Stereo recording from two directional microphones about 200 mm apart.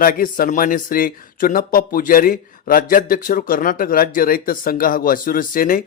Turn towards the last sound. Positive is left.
turn(degrees=45)  # may be behind; listen again after turning